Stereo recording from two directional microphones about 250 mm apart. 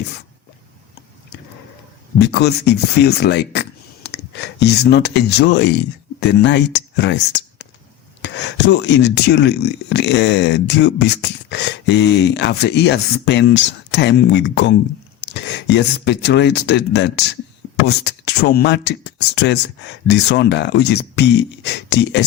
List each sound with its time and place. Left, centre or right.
2.1 s speech: left